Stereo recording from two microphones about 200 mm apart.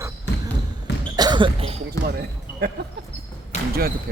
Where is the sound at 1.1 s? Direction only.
20° right (ahead or behind).